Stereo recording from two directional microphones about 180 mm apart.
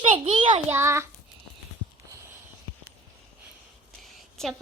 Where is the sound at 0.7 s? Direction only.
15° right (ahead or behind).